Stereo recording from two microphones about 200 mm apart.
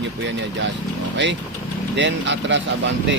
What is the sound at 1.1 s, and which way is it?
Speech, 60° right (ahead or behind).